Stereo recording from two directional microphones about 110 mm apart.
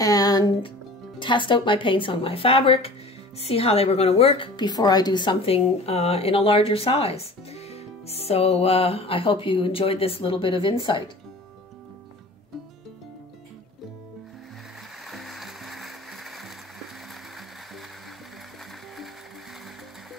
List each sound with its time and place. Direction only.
0.0 s music: 35° left (ahead or behind)
1.2 s a woman's voice: 45° left (ahead or behind)
4.6 s speech: 40° left (ahead or behind)
15.0 s music: centre (ahead or behind)